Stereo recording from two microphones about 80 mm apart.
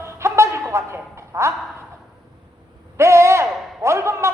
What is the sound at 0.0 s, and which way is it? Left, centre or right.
Music, right.